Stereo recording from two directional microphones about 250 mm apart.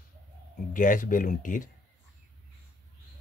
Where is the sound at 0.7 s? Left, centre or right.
Left.